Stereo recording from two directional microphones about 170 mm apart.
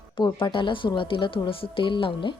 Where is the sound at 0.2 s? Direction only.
30° left (ahead or behind).